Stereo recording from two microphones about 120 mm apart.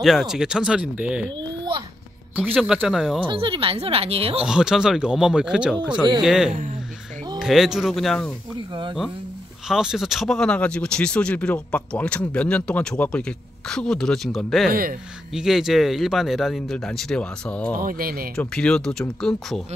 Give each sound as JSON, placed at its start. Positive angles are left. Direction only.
{"t": 0.0, "sound": "a man's voice", "side_deg": -5}
{"t": 2.4, "sound": "a man's voice", "side_deg": 0}
{"t": 3.3, "sound": "speech", "side_deg": -45}
{"t": 4.5, "sound": "a man's voice", "side_deg": -5}
{"t": 9.7, "sound": "a man's voice", "side_deg": -5}